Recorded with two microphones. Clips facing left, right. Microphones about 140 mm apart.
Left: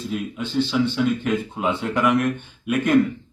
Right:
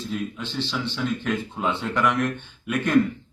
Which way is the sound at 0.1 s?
5° left (ahead or behind).